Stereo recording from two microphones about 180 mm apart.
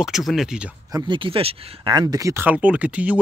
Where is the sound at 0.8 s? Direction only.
25° right (ahead or behind); by 3.2 s 5° right (ahead or behind).